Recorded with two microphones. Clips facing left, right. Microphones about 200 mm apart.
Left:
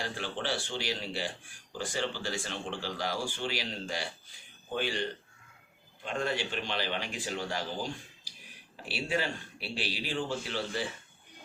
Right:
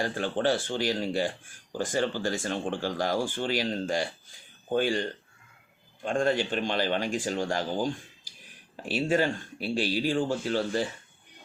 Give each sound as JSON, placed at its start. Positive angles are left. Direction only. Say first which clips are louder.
{"t": 0.0, "sound": "speech", "louder": "right 9 dB", "side_deg": -50}